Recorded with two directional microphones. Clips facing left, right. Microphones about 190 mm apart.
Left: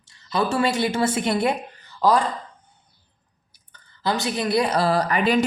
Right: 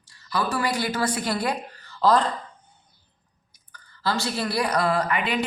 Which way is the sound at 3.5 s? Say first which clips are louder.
Right 3 dB; 20° left (ahead or behind).